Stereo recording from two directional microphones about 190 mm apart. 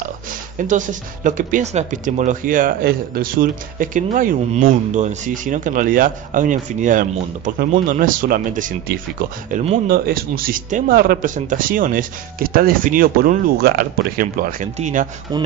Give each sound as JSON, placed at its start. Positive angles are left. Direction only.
{"t": 0.3, "sound": "speech", "side_deg": -45}
{"t": 9.8, "sound": "speech", "side_deg": -50}
{"t": 15.3, "sound": "speech", "side_deg": -20}